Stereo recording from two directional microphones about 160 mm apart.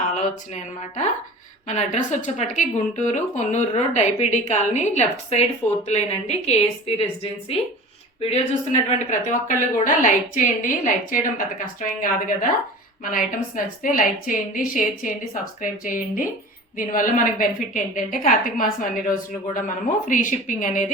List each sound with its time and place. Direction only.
0.2 s a woman's voice: 45° left (ahead or behind)
13.8 s a woman's voice: 55° left (ahead or behind)